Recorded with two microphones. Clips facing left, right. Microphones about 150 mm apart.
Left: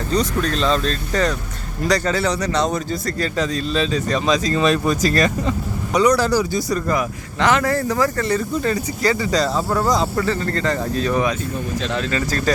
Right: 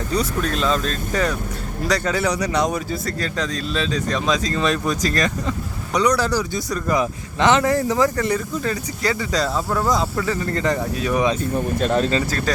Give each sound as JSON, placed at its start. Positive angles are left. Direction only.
{"t": 0.1, "sound": "speech", "side_deg": -10}
{"t": 6.9, "sound": "speech", "side_deg": -20}
{"t": 8.6, "sound": "speech", "side_deg": 0}
{"t": 10.4, "sound": "speech", "side_deg": -15}
{"t": 11.5, "sound": "speech", "side_deg": -50}